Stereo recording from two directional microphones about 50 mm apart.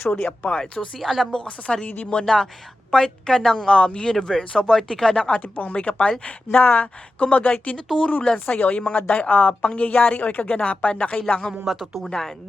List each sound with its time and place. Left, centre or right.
0.2 s speech: left
0.9 s speech: centre
1.3 s speech: left
2.2 s speech: centre
5.4 s speech: left
11.6 s speech: centre